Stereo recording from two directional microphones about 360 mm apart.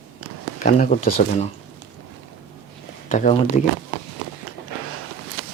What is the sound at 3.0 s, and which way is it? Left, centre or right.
Speech, centre.